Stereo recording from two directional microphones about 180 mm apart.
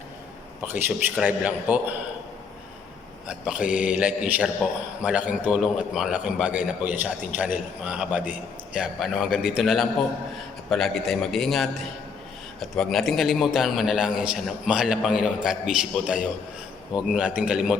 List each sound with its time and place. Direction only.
0.6 s a man's voice: 10° right (ahead or behind)
3.2 s a man's voice: 5° right (ahead or behind)
12.7 s a man's voice: centre (ahead or behind)